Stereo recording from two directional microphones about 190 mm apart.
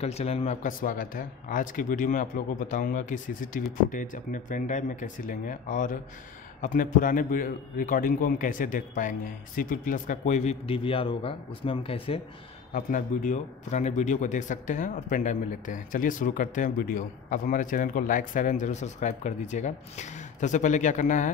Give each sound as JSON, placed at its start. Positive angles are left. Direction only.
{"t": 0.0, "sound": "a man's voice", "side_deg": 35}
{"t": 12.7, "sound": "speech", "side_deg": 45}